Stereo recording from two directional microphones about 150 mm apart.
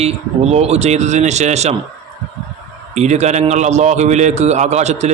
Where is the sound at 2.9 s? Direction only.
50° right (ahead or behind).